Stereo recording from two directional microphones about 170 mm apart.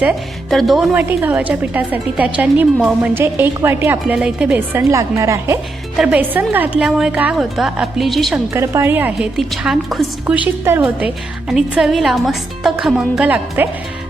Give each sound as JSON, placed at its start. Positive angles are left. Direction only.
{"t": 0.5, "sound": "a woman's voice", "side_deg": 0}
{"t": 8.5, "sound": "a woman's voice", "side_deg": -15}